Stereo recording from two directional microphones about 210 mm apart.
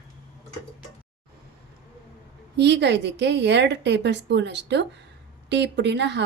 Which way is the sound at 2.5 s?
55° right (ahead or behind).